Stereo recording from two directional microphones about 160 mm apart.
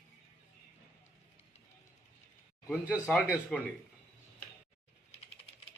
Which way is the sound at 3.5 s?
5° left (ahead or behind).